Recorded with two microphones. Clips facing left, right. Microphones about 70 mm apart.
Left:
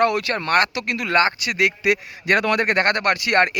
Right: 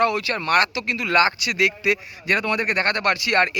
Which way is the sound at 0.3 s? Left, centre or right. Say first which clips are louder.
Right 1 dB; left.